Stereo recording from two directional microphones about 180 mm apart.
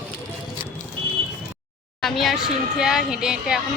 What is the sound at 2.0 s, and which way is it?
Speech, centre (ahead or behind).